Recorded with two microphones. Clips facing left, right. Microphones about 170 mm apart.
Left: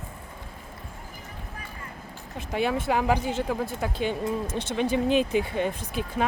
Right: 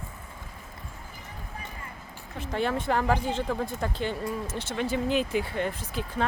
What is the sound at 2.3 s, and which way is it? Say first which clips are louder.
Speech: left 2 dB; 15° left (ahead or behind).